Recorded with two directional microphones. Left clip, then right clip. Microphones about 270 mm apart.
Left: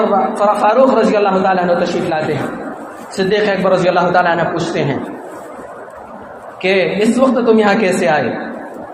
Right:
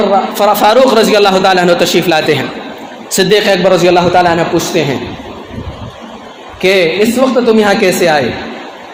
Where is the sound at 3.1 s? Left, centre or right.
Right.